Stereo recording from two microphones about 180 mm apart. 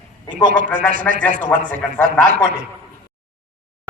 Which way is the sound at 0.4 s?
50° right (ahead or behind).